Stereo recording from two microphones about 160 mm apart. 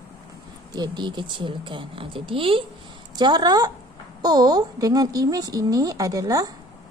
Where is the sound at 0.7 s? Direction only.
25° right (ahead or behind).